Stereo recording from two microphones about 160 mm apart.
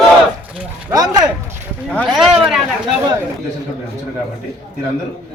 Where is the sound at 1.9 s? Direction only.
10° left (ahead or behind).